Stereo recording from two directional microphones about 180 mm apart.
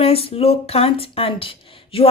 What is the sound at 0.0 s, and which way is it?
A woman's voice, 35° left (ahead or behind).